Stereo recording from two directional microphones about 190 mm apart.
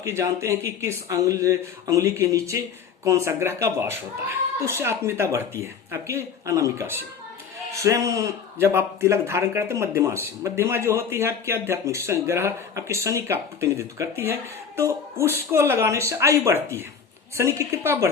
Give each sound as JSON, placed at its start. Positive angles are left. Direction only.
{"t": 0.0, "sound": "a man's voice", "side_deg": -15}